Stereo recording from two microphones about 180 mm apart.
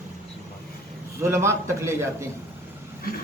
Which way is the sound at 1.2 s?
15° right (ahead or behind).